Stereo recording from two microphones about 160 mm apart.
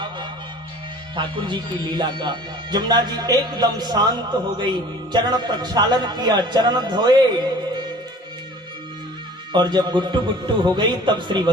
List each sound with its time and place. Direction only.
1.1 s speech: 30° right (ahead or behind)
9.5 s speech: 25° right (ahead or behind)